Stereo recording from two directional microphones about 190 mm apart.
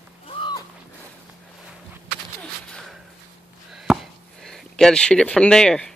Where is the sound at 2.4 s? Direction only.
5° left (ahead or behind).